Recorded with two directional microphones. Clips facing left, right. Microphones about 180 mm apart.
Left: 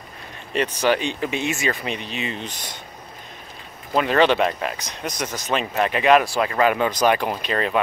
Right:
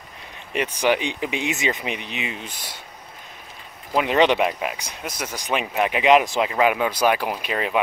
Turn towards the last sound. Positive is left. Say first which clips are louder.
# left 2 dB
turn(degrees=-10)  # may be behind; listen again after turning